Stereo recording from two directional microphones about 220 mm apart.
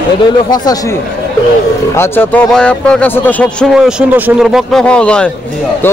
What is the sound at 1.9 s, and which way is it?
A man's voice, 10° left (ahead or behind).